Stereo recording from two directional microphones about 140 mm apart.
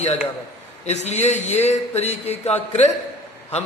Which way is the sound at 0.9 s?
50° left (ahead or behind).